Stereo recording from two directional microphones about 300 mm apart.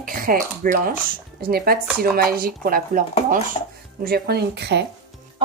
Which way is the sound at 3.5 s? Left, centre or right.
Centre.